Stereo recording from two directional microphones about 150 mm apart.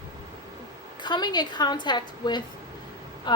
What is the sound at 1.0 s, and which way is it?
A woman's voice, 30° left (ahead or behind).